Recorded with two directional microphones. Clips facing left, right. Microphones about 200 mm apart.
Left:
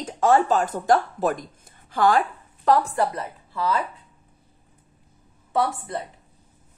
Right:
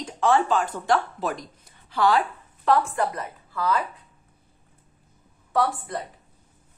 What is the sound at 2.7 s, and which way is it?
Speech, 35° left (ahead or behind).